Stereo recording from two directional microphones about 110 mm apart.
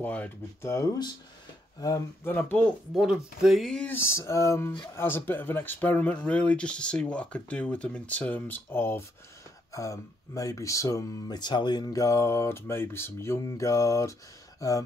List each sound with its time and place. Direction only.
0.0 s speech: 15° left (ahead or behind)
0.6 s speech: 25° left (ahead or behind)
2.2 s speech: 15° left (ahead or behind)
2.9 s speech: 5° right (ahead or behind)
3.8 s speech: 20° left (ahead or behind)
9.7 s speech: 30° left (ahead or behind)